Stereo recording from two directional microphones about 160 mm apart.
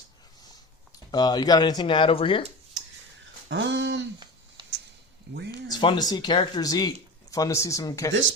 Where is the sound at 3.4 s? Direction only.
90° right.